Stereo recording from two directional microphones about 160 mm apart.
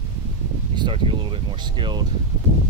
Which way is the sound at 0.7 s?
30° right (ahead or behind).